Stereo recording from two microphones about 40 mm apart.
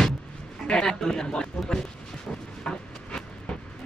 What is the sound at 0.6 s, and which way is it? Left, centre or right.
Speech, centre.